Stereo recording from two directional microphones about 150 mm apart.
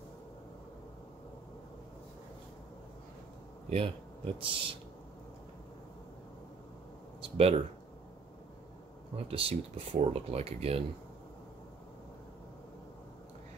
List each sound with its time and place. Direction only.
3.7 s speech: 40° right (ahead or behind)
7.2 s speech: 40° right (ahead or behind)
9.1 s speech: 40° right (ahead or behind)